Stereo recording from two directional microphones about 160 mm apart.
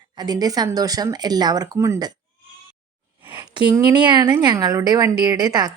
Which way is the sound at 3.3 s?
30° right (ahead or behind).